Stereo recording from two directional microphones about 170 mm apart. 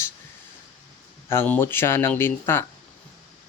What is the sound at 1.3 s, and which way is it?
Speech, 15° left (ahead or behind).